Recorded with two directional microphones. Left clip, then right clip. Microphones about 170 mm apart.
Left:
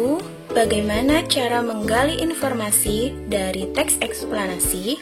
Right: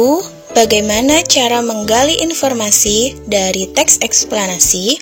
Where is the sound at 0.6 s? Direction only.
35° right (ahead or behind).